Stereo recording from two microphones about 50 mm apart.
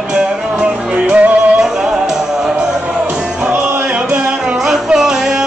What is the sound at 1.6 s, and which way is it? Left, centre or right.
Music, centre.